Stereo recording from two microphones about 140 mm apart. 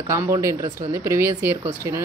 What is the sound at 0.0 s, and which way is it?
A woman's voice, 20° right (ahead or behind).